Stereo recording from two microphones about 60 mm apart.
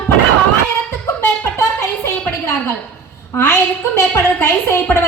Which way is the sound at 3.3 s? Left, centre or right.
Left.